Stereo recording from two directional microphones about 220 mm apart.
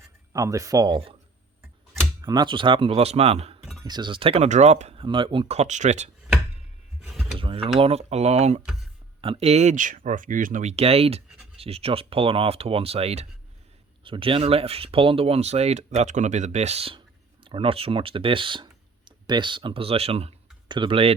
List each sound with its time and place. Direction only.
0.3 s speech: 15° right (ahead or behind); by 6.1 s 30° right (ahead or behind)
7.0 s mechanisms: 10° right (ahead or behind)
7.3 s speech: 25° right (ahead or behind)